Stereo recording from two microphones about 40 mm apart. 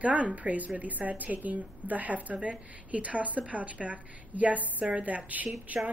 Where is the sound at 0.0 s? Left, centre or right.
Right.